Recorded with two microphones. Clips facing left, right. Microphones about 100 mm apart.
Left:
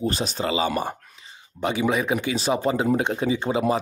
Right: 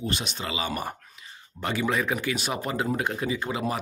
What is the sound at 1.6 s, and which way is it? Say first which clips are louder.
Speech: left 4 dB; 20° left (ahead or behind).